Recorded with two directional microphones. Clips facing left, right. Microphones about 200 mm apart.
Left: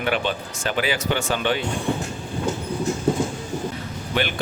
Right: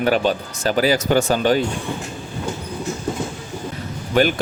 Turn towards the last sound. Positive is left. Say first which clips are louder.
# right 8 dB
turn(degrees=-45)  # may be behind; listen again after turning